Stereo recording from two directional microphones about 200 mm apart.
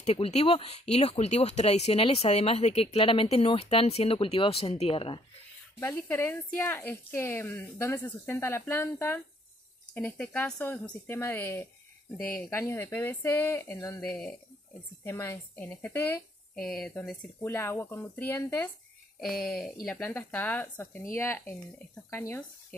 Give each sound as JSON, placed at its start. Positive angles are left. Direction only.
{"t": 0.0, "sound": "speech", "side_deg": 30}
{"t": 5.8, "sound": "speech", "side_deg": 10}